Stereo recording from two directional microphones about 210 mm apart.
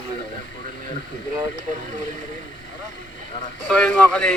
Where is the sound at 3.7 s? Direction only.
5° left (ahead or behind).